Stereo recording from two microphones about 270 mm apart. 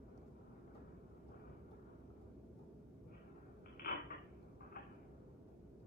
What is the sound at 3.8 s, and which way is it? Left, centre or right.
Dishes, left.